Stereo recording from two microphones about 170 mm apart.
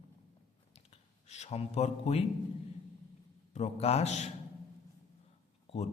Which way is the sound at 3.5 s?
40° left (ahead or behind).